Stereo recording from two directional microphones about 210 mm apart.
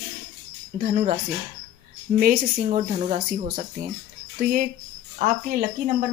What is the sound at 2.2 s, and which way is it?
Speech, 40° right (ahead or behind).